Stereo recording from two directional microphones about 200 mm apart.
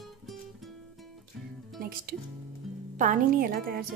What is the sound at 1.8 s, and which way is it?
Speech, 45° right (ahead or behind).